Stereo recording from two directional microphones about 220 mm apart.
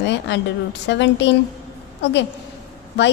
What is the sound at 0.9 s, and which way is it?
A woman's voice, 55° left (ahead or behind).